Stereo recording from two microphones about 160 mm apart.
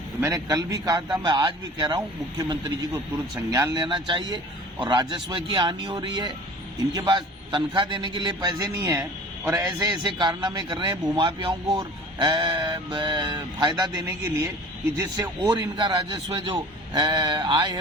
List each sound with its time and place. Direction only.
0.2 s a man's voice: 20° right (ahead or behind)
10.0 s speech: 30° right (ahead or behind)